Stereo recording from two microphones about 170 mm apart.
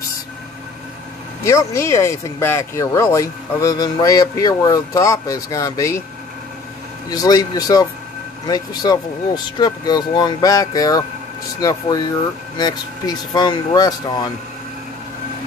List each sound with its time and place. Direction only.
1.4 s speech: 15° left (ahead or behind)
7.1 s speech: 20° left (ahead or behind)
12.5 s speech: 25° left (ahead or behind)